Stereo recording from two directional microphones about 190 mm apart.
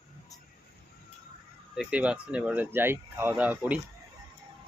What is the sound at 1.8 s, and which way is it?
Speech, 5° right (ahead or behind).